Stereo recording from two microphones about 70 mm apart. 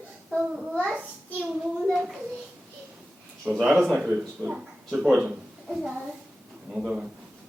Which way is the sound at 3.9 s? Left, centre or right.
Centre.